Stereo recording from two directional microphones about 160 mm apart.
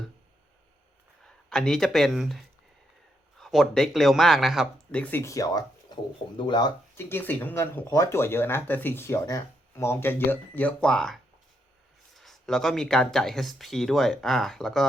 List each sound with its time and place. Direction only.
1.2 s speech: 5° left (ahead or behind); by 6.7 s 25° left (ahead or behind)
6.9 s speech: 15° left (ahead or behind)